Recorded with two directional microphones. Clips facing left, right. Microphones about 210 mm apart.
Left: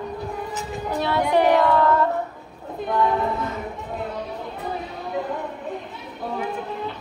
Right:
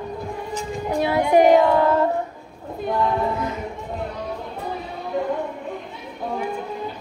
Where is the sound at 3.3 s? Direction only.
20° right (ahead or behind).